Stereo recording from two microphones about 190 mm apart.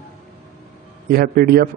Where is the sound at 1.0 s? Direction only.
55° right (ahead or behind).